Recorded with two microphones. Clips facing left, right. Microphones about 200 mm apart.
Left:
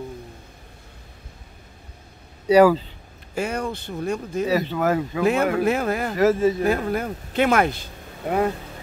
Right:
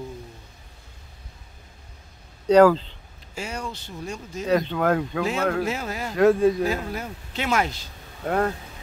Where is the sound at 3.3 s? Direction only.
55° left (ahead or behind).